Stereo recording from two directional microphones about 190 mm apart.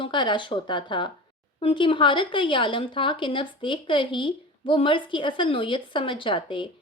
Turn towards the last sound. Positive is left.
turn(degrees=25)  # may be behind; listen again after turning